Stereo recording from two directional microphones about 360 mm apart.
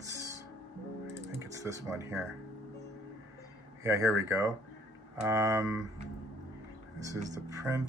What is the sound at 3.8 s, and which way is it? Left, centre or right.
Speech, centre.